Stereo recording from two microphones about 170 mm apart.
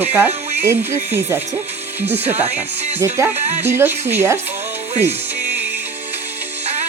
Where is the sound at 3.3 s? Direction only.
40° right (ahead or behind).